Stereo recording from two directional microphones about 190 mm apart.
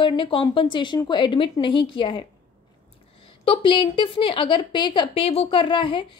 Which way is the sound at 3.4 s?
25° left (ahead or behind).